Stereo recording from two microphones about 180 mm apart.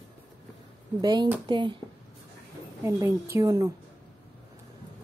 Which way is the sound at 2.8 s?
15° right (ahead or behind).